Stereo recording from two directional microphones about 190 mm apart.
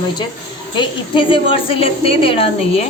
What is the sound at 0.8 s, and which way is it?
A woman's voice, 25° left (ahead or behind).